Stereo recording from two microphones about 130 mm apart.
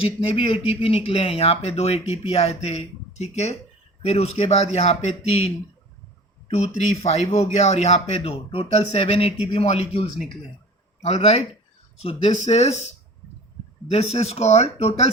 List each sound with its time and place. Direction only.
0.0 s speech: 45° left (ahead or behind)
6.6 s a man's voice: 55° left (ahead or behind)
13.9 s speech: 50° left (ahead or behind)